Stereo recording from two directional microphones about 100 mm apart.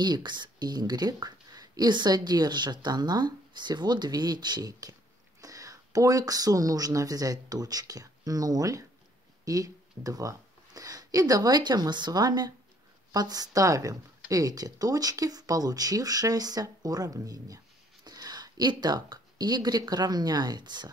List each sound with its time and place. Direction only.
0.0 s a woman's voice: 45° right (ahead or behind)